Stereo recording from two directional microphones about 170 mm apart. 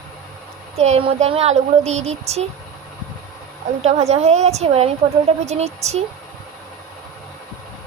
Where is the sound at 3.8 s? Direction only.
40° right (ahead or behind).